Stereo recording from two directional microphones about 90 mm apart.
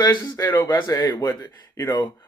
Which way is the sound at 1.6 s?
25° left (ahead or behind).